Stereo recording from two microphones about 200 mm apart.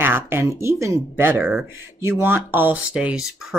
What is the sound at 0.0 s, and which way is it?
Speech, 10° right (ahead or behind).